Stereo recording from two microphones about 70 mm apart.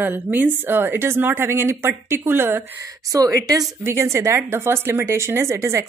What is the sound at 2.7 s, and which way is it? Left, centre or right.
Speech, right.